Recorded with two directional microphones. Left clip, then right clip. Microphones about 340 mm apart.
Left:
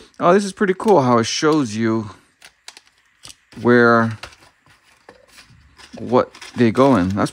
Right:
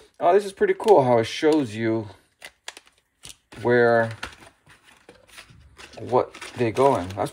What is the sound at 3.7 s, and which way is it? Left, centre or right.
Speech, centre.